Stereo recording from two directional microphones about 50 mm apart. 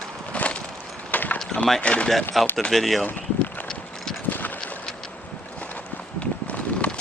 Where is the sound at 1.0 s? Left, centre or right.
Left.